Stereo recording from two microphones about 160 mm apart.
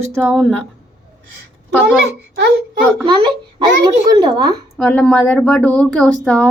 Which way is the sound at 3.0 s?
35° right (ahead or behind).